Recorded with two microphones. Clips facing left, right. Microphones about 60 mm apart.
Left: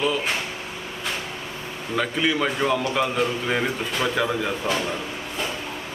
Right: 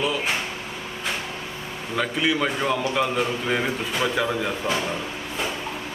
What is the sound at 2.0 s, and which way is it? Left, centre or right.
A man's voice, centre.